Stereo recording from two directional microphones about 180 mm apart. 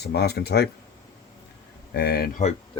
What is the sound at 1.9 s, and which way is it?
Speech, 60° left (ahead or behind).